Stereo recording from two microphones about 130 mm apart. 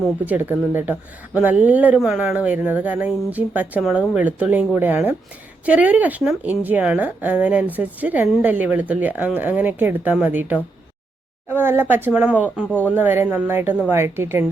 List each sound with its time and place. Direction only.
0.3 s a woman's voice: 15° right (ahead or behind)